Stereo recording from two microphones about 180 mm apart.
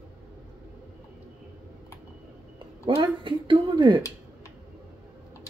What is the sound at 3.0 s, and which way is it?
Speech, 30° right (ahead or behind).